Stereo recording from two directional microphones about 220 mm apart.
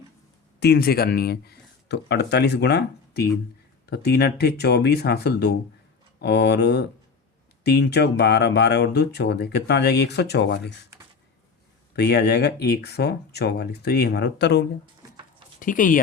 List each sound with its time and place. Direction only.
0.6 s speech: 45° left (ahead or behind)
11.9 s speech: 50° left (ahead or behind)
15.6 s speech: 35° left (ahead or behind)